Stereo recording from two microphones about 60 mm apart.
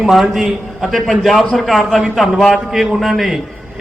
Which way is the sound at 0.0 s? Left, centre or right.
Centre.